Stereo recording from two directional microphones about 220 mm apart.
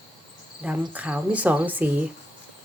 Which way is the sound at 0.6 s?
5° right (ahead or behind).